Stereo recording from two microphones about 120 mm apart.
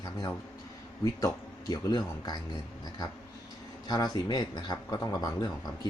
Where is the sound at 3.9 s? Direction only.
35° left (ahead or behind).